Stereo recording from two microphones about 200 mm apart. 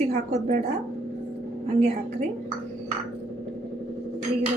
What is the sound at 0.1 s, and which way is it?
Speech, 35° right (ahead or behind).